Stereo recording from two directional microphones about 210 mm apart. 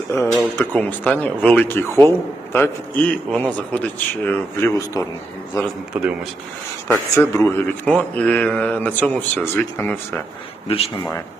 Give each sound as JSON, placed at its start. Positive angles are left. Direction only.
{"t": 0.1, "sound": "speech", "side_deg": 10}
{"t": 5.9, "sound": "speech", "side_deg": -5}
{"t": 6.8, "sound": "speech", "side_deg": 10}
{"t": 10.7, "sound": "speech", "side_deg": 25}